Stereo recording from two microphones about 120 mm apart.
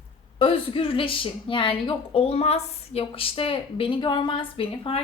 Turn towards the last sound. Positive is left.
turn(degrees=50)  # may be behind; listen again after turning